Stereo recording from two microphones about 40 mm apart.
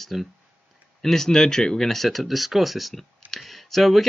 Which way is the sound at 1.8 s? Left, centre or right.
Centre.